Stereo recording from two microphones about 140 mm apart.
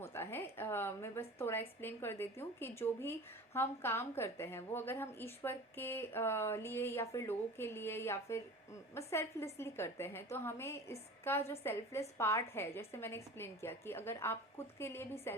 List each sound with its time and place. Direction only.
0.0 s a woman's voice: 15° left (ahead or behind)